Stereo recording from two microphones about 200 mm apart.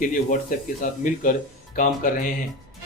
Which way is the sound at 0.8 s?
40° left (ahead or behind).